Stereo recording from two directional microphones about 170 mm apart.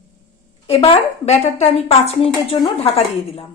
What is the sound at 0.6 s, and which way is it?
A woman's voice, 35° left (ahead or behind).